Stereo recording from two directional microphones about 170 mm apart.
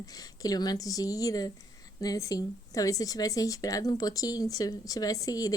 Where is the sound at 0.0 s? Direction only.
20° left (ahead or behind).